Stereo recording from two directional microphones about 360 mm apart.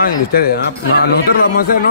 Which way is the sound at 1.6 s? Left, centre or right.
Left.